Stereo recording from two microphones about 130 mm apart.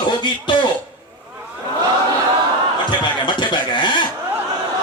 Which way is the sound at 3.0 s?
35° left (ahead or behind).